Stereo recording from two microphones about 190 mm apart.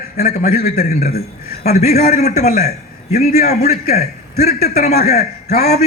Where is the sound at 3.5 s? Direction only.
55° left (ahead or behind).